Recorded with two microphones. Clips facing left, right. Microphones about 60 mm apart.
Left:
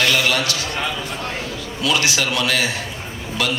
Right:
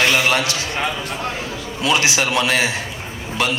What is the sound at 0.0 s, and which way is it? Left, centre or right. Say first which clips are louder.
A man's voice: right 2 dB; right.